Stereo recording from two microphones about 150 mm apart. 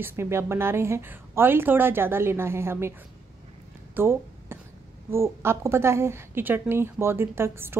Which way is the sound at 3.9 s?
15° right (ahead or behind).